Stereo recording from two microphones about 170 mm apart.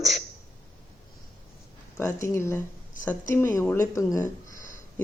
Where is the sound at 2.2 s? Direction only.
15° left (ahead or behind).